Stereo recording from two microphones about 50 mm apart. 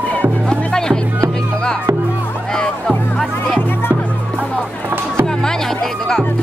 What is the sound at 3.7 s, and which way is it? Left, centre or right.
Music, left.